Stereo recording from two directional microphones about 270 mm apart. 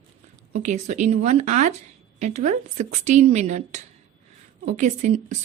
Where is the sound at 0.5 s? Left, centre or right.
Right.